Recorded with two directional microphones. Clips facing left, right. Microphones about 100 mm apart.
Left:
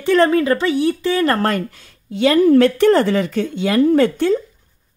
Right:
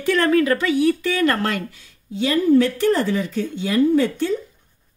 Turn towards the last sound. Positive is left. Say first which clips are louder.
# left 4 dB
turn(degrees=65)  # may be behind; listen again after turning